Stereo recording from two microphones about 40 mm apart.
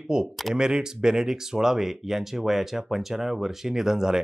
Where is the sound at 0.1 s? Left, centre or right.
Centre.